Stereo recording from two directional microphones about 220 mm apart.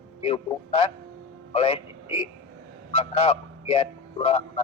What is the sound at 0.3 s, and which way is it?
Speech, 25° left (ahead or behind).